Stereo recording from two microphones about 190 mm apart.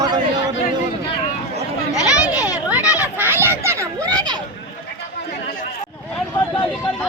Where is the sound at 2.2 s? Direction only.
5° right (ahead or behind).